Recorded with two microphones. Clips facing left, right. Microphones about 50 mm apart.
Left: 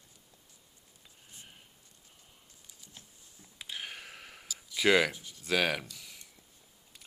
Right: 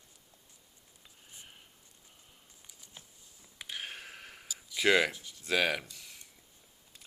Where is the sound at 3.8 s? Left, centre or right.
Centre.